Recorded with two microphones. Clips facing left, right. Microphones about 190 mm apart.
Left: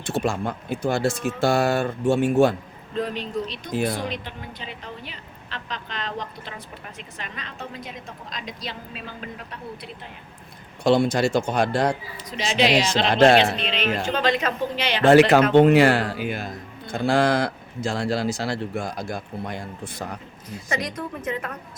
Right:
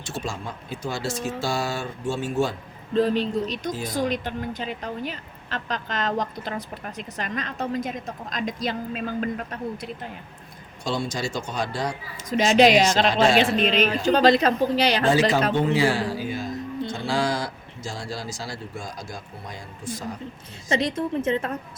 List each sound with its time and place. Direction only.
0.0 s speech: 60° left (ahead or behind)
2.9 s a woman's voice: 30° right (ahead or behind)
3.4 s a woman's voice: 45° right (ahead or behind)
3.7 s speech: 65° left (ahead or behind)
3.9 s a woman's voice: 45° right (ahead or behind)
10.8 s speech: 60° left (ahead or behind)
12.4 s a woman's voice: 45° right (ahead or behind)
13.1 s speech: 60° left (ahead or behind)
13.4 s a woman's voice: 45° right (ahead or behind)
15.1 s speech: 65° left (ahead or behind)
20.5 s a woman's voice: 25° right (ahead or behind)